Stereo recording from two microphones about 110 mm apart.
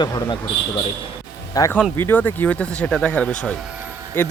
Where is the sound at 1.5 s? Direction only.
30° left (ahead or behind).